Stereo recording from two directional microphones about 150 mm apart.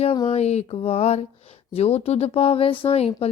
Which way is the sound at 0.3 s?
45° left (ahead or behind).